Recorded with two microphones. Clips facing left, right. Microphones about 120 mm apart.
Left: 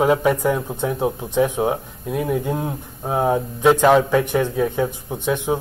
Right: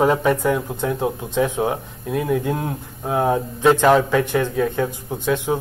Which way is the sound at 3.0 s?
5° left (ahead or behind).